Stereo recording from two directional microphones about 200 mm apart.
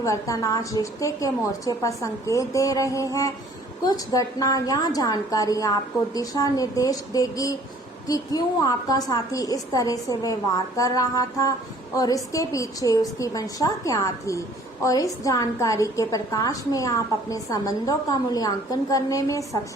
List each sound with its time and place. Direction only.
0.0 s a woman's voice: 15° left (ahead or behind)